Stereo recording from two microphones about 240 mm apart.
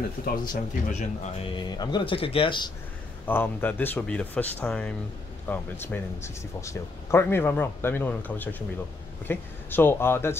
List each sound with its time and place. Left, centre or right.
0.2 s speech: left
3.3 s speech: centre